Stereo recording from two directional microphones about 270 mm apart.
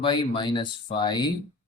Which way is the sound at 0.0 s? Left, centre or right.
Centre.